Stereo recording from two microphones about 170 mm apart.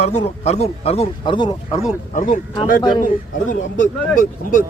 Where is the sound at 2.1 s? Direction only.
45° left (ahead or behind).